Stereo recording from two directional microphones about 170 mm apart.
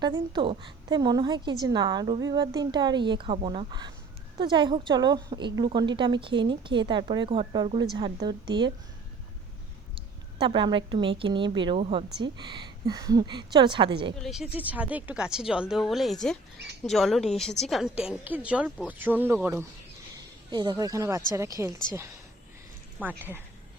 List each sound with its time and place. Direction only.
0.0 s a woman's voice: 25° right (ahead or behind)
10.4 s a woman's voice: 30° right (ahead or behind)
14.2 s a woman's voice: centre (ahead or behind)
20.1 s a woman's voice: 25° right (ahead or behind)
23.0 s a woman's voice: 10° right (ahead or behind)